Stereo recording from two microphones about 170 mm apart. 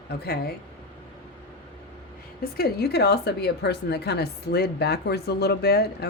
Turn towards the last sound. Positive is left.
turn(degrees=70)  # may be behind; listen again after turning